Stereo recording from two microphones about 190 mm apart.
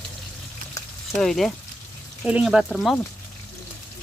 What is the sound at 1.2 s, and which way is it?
Speech, centre (ahead or behind).